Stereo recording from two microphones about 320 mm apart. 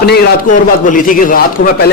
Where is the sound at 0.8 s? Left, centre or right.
Left.